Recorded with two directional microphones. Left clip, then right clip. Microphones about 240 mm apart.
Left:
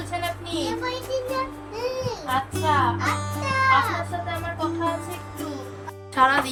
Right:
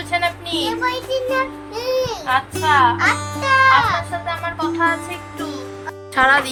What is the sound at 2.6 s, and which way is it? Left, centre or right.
Speech, centre.